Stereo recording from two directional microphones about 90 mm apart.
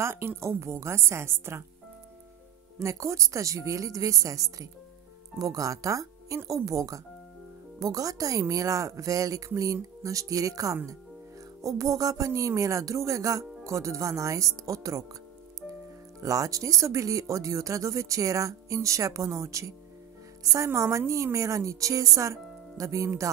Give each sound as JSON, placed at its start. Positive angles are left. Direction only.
{"t": 0.0, "sound": "a woman's voice", "side_deg": -25}
{"t": 2.8, "sound": "speech", "side_deg": -35}
{"t": 16.2, "sound": "speech", "side_deg": -40}